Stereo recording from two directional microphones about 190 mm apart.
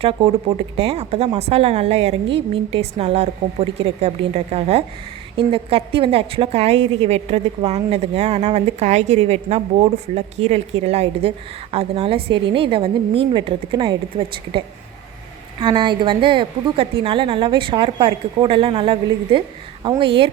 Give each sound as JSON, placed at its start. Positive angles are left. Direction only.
{"t": 0.0, "sound": "a woman's voice", "side_deg": -30}
{"t": 15.6, "sound": "a woman's voice", "side_deg": -25}